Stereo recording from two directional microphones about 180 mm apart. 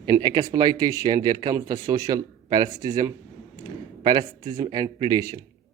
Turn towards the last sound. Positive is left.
turn(degrees=-20)  # may be behind; listen again after turning